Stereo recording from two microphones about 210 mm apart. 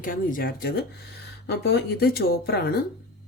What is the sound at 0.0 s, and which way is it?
Speech, 40° left (ahead or behind).